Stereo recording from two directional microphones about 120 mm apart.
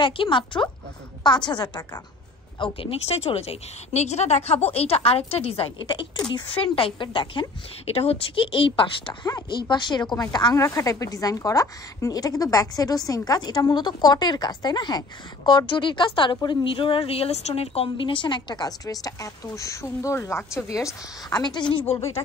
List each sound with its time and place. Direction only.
0.0 s a woman's voice: 45° left (ahead or behind)
2.6 s a woman's voice: 50° left (ahead or behind)
6.1 s a woman's voice: 45° left (ahead or behind)
21.9 s speech: 25° left (ahead or behind)